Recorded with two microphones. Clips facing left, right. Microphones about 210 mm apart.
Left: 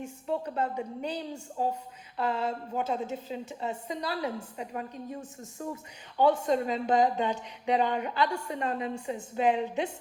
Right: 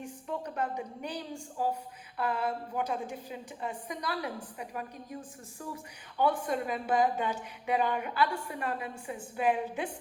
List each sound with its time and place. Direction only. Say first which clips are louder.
0.0 s a woman's voice: left 5 dB; 25° left (ahead or behind)